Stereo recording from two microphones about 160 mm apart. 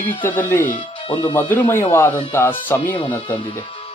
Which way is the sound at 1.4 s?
10° left (ahead or behind).